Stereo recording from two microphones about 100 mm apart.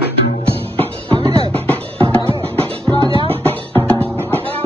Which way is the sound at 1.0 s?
65° right (ahead or behind).